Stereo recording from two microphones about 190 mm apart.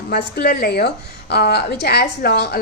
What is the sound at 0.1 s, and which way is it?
A woman's voice, 55° left (ahead or behind).